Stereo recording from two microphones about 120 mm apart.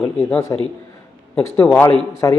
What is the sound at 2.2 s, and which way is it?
Speech, 25° left (ahead or behind).